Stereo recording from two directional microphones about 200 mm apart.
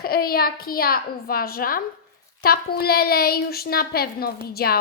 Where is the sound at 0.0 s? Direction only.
50° left (ahead or behind).